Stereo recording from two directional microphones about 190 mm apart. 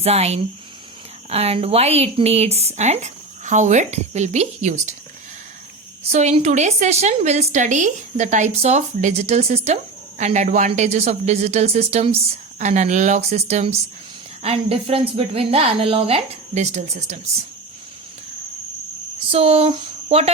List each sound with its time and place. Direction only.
0.0 s a woman's voice: 35° right (ahead or behind)
6.1 s a woman's voice: 35° right (ahead or behind)
19.3 s speech: 30° right (ahead or behind)